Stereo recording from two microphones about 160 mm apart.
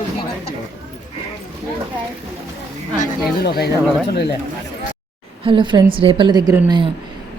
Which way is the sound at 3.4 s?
80° left.